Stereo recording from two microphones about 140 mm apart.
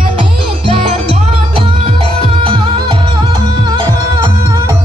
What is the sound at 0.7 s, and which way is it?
Music, 40° right (ahead or behind).